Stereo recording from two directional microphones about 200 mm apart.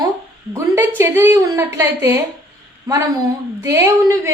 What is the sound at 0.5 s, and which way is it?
A woman's voice, 10° right (ahead or behind).